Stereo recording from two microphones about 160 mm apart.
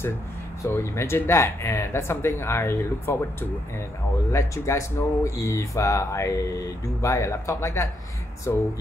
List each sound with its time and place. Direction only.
0.6 s speech: 15° left (ahead or behind)